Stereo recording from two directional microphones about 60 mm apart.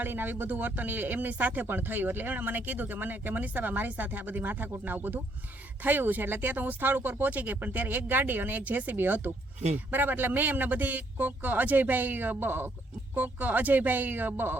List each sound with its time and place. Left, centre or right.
0.0 s speech: right